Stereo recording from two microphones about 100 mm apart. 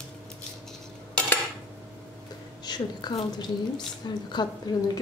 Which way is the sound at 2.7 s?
45° left (ahead or behind).